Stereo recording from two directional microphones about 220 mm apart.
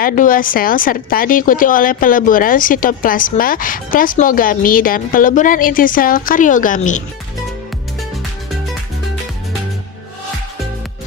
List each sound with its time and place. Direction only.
0.0 s a woman's voice: 40° left (ahead or behind)